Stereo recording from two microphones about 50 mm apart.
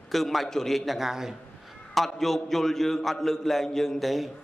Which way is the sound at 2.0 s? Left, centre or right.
Centre.